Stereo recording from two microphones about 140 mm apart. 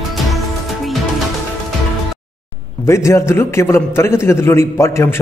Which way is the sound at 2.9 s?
20° left (ahead or behind).